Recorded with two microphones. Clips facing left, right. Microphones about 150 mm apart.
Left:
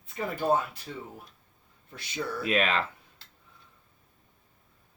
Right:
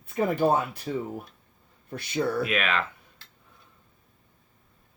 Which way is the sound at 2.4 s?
30° left (ahead or behind).